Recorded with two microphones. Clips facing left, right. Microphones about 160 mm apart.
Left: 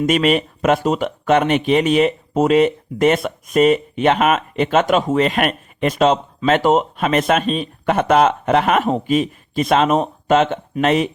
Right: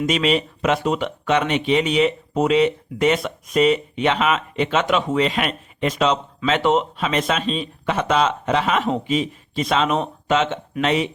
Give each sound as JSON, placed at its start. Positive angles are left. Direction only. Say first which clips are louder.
{"t": 0.1, "sound": "speech", "louder": "left 4 dB", "side_deg": 50}